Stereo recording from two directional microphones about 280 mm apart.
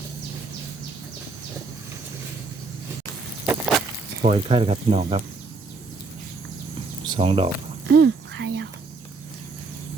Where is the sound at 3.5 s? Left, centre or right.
Centre.